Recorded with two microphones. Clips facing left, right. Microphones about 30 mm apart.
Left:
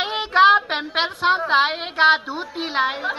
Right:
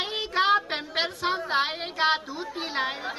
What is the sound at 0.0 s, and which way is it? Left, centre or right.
A woman's voice, left.